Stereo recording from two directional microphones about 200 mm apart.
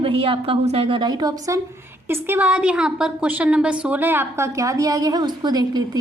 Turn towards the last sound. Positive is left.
turn(degrees=-20)  # may be behind; listen again after turning